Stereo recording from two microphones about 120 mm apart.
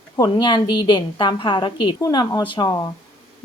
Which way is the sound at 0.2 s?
40° left (ahead or behind).